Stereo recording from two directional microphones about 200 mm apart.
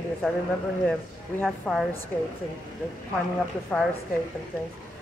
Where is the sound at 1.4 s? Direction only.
Centre (ahead or behind).